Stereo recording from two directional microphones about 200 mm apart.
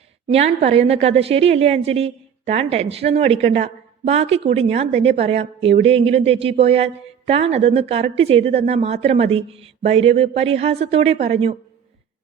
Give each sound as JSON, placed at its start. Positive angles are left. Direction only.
{"t": 0.3, "sound": "a woman's voice", "side_deg": -30}